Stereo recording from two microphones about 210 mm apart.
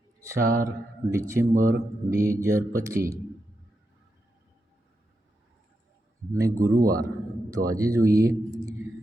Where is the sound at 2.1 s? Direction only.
15° right (ahead or behind).